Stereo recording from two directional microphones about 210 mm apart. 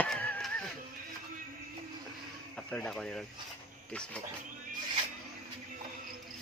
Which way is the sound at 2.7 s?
5° left (ahead or behind).